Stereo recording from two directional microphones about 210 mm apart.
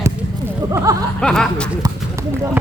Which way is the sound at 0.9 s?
15° right (ahead or behind).